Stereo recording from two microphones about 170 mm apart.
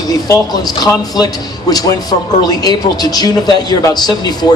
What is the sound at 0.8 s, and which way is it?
Speech, 20° left (ahead or behind).